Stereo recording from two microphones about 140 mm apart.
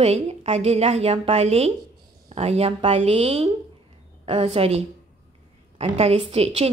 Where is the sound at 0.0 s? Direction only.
50° right (ahead or behind).